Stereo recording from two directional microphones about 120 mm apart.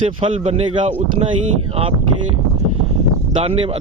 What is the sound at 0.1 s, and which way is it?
Speech, 50° right (ahead or behind).